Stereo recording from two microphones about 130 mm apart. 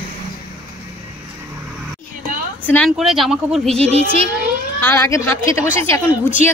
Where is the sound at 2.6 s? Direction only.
10° left (ahead or behind).